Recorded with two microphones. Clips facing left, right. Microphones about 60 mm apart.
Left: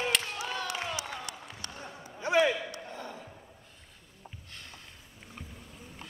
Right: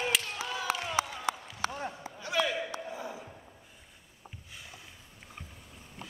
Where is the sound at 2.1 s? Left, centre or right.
Left.